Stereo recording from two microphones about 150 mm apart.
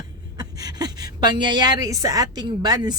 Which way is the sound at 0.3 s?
25° right (ahead or behind).